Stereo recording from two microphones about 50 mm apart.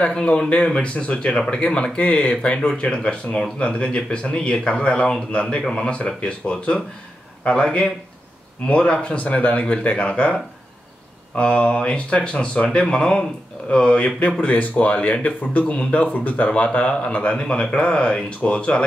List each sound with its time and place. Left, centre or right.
0.0 s speech: left